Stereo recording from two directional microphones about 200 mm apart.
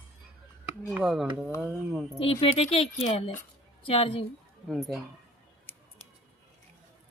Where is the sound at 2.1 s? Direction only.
30° left (ahead or behind).